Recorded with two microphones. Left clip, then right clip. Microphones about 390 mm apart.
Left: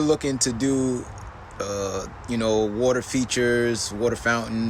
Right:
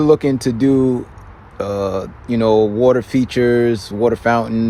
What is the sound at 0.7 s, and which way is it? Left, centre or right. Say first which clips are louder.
Speech: right 11 dB; right.